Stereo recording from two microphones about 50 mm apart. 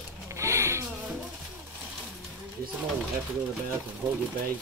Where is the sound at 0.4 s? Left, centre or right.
Right.